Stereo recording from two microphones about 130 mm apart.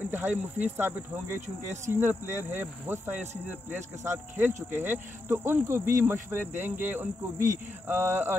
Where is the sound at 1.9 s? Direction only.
15° right (ahead or behind).